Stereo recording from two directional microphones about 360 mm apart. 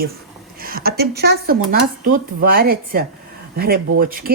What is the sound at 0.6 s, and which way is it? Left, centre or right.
Speech, right.